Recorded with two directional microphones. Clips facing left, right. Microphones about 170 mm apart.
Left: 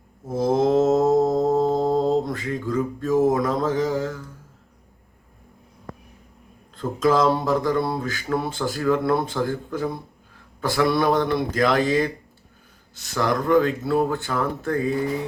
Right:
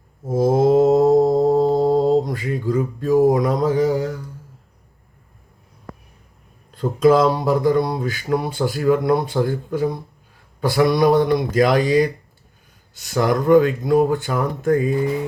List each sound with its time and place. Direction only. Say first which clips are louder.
0.3 s mantra: right 4 dB; 15° right (ahead or behind)
6.7 s speech: right 5 dB; 20° right (ahead or behind)